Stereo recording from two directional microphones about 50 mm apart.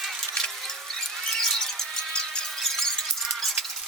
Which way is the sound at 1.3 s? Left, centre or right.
Centre.